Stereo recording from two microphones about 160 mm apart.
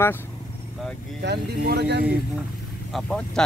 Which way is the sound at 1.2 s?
85° right.